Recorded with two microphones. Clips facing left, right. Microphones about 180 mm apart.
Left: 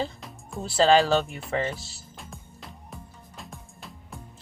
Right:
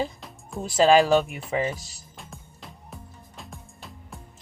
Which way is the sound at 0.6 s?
15° right (ahead or behind).